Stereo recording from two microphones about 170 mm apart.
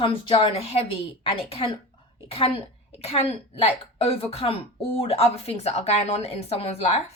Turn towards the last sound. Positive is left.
turn(degrees=40)  # may be behind; listen again after turning